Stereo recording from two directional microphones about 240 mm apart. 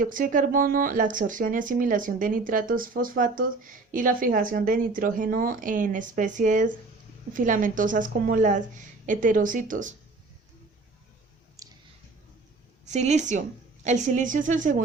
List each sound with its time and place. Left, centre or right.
0.0 s speech: right
11.6 s clicking: centre
12.8 s a woman's voice: right